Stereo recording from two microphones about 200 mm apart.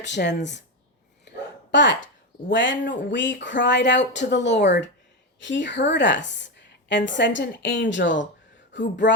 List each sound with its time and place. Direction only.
0.0 s speech: 60° left (ahead or behind)
1.7 s a woman's voice: 65° left (ahead or behind)